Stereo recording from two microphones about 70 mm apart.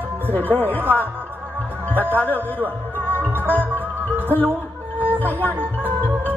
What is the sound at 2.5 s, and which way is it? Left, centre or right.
Music, right.